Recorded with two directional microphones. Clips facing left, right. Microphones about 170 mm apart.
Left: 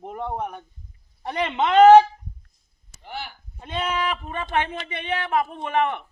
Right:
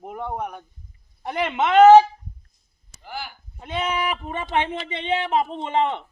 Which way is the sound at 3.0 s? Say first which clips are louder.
Even; centre (ahead or behind).